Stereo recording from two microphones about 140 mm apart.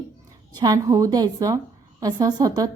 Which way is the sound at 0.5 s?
30° right (ahead or behind).